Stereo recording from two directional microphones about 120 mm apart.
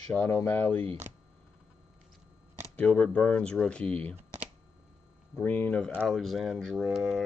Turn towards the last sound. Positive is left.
turn(degrees=0)  # may be behind; listen again after turning